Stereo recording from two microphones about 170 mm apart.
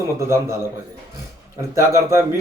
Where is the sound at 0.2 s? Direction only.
15° right (ahead or behind).